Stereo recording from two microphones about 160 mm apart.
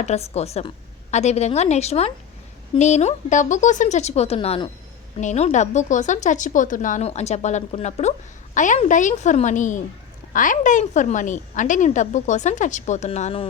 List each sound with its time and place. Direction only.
0.0 s a woman's voice: 45° left (ahead or behind)
5.2 s a woman's voice: 45° left (ahead or behind)